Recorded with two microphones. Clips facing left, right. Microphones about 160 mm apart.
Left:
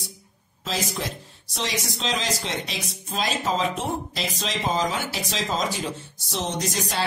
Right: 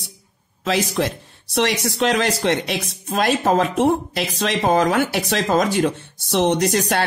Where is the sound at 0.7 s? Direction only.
65° right (ahead or behind).